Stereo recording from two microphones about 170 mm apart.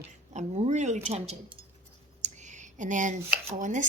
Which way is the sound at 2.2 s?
45° right (ahead or behind).